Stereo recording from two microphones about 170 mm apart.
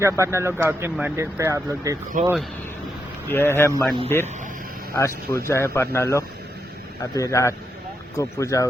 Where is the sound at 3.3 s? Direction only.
15° left (ahead or behind).